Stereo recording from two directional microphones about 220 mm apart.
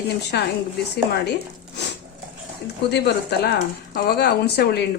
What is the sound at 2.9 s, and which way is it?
Speech, 50° left (ahead or behind).